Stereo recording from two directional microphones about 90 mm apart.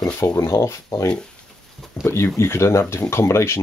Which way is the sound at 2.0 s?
30° left (ahead or behind).